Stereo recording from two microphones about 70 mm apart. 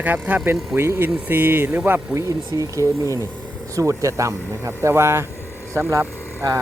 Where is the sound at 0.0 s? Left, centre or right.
Right.